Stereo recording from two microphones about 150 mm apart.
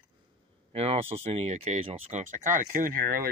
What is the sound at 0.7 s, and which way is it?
Speech, 45° right (ahead or behind).